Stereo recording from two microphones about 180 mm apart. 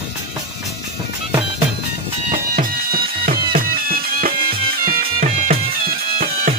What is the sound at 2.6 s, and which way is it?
Music, 55° right (ahead or behind).